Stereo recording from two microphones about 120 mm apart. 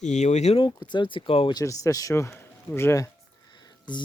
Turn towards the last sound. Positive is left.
turn(degrees=35)  # may be behind; listen again after turning